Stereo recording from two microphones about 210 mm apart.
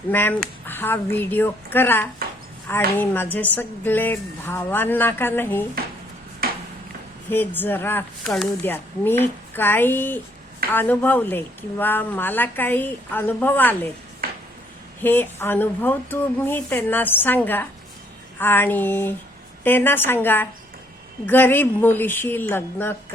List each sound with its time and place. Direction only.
0.1 s speech: 10° left (ahead or behind)
6.4 s a sound: 45° right (ahead or behind)
7.3 s speech: 10° left (ahead or behind)
15.0 s speech: 10° left (ahead or behind)